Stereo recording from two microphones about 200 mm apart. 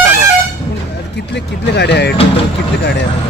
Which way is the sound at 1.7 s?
55° left (ahead or behind).